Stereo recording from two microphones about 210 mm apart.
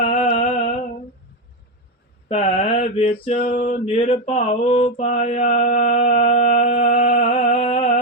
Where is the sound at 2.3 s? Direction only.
30° left (ahead or behind).